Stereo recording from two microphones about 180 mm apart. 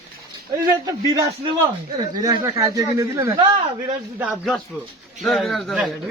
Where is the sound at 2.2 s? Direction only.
20° right (ahead or behind).